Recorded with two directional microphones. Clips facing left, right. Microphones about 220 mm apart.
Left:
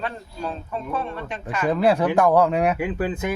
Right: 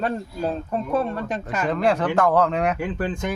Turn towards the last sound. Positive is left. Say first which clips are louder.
# left 1 dB
turn(degrees=5)  # may be behind; listen again after turning